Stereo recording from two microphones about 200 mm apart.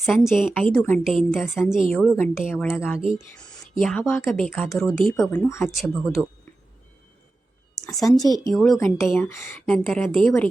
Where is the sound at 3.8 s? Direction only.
Centre (ahead or behind).